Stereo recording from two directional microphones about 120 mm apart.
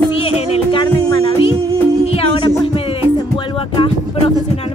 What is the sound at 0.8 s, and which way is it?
Music, 45° left (ahead or behind).